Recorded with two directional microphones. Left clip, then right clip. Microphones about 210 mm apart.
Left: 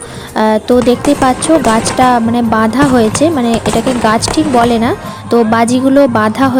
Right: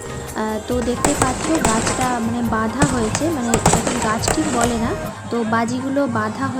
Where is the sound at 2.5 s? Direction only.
45° left (ahead or behind).